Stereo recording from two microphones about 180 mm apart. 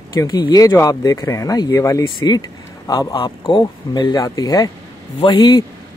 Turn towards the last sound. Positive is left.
turn(degrees=25)  # may be behind; listen again after turning